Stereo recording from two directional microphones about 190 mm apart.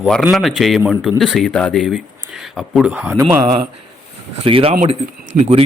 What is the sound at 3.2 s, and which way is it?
Speech, 20° right (ahead or behind).